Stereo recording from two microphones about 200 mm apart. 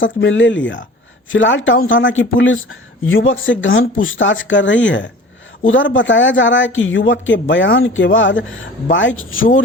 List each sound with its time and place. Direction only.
0.0 s speech: 70° left (ahead or behind)